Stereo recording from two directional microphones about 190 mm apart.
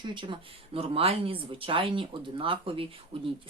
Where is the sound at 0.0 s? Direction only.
25° right (ahead or behind).